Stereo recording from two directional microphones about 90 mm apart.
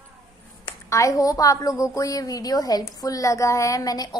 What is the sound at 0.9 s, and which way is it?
A woman's voice, 35° left (ahead or behind).